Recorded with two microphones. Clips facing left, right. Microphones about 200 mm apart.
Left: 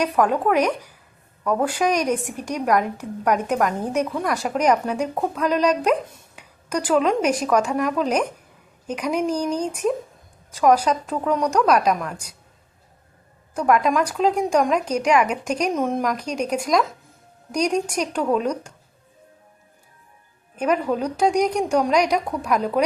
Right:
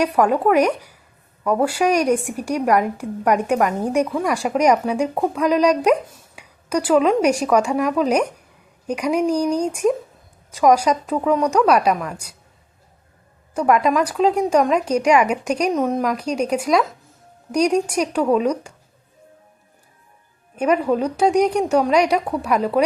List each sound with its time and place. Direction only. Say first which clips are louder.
0.0 s a woman's voice: right 3 dB; 10° right (ahead or behind)
9.3 s a woman's voice: right 4 dB; 10° right (ahead or behind)
13.6 s a woman's voice: right 2 dB; 5° right (ahead or behind)
20.6 s a woman's voice: right 3 dB; 10° right (ahead or behind)